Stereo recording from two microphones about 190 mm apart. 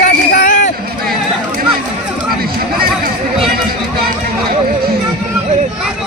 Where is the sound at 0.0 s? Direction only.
45° left (ahead or behind).